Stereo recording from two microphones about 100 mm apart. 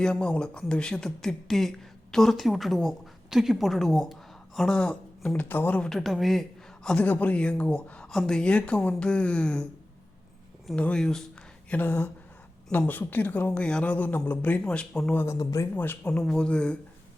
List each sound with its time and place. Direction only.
0.0 s a woman's voice: 10° left (ahead or behind)
5.4 s speech: 20° left (ahead or behind)
5.9 s a man's voice: centre (ahead or behind)
6.8 s speech: 15° left (ahead or behind)
10.8 s speech: 10° left (ahead or behind)
11.7 s speech: 20° left (ahead or behind)
15.1 s speech: 20° left (ahead or behind)
15.4 s speech: 35° left (ahead or behind)
15.7 s speech: 15° left (ahead or behind)